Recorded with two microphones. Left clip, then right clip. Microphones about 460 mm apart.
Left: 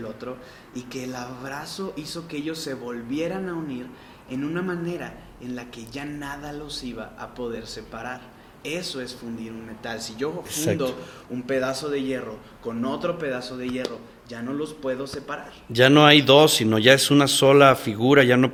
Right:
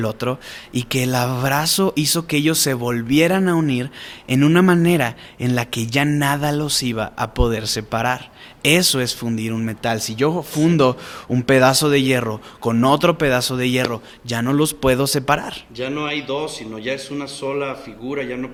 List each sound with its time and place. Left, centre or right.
0.0 s speech: right
11.4 s speech: right
15.7 s speech: left